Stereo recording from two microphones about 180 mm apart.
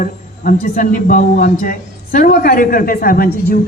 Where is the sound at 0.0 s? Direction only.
50° left (ahead or behind).